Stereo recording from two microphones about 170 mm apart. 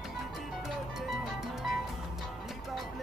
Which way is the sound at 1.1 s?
Centre (ahead or behind).